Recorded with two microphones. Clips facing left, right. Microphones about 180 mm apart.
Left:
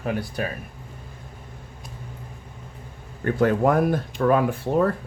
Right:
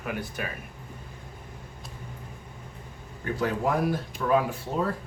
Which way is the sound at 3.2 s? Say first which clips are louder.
Left 7 dB; 55° left (ahead or behind).